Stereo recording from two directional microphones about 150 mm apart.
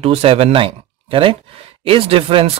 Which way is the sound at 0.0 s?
40° right (ahead or behind).